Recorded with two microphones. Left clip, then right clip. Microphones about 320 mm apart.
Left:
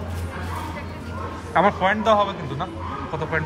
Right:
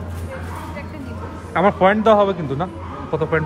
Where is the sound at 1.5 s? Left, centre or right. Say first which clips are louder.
Right 3 dB; centre.